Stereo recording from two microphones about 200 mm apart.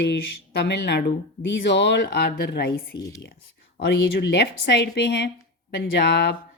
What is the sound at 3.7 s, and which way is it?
A woman's voice, 60° left (ahead or behind).